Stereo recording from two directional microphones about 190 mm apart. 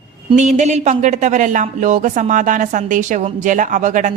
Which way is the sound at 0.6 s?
40° right (ahead or behind).